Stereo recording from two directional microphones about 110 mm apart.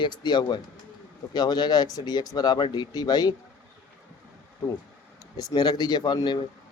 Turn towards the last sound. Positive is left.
turn(degrees=40)  # may be behind; listen again after turning